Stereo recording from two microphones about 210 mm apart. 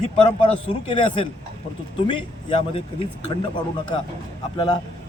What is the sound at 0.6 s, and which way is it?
Speech, 25° left (ahead or behind).